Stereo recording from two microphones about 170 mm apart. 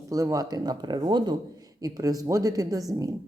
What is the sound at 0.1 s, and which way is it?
Speech, 20° right (ahead or behind).